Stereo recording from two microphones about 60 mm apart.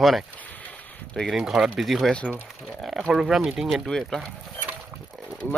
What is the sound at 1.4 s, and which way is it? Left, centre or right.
Speech, centre.